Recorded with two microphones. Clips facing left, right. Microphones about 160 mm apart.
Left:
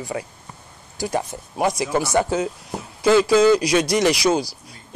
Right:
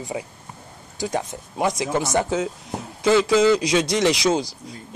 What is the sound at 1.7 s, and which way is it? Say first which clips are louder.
Speech: left 1 dB; 20° right (ahead or behind).